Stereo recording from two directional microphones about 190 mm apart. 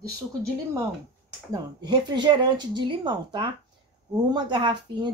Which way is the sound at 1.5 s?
20° right (ahead or behind).